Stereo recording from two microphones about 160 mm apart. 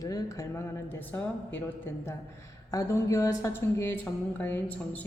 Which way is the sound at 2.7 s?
20° left (ahead or behind).